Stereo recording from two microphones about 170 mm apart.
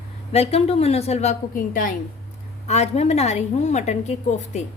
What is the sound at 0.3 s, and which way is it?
A woman's voice, 35° left (ahead or behind).